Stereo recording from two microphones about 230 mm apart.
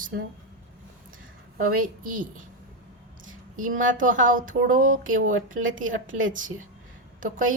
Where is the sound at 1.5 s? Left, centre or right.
Right.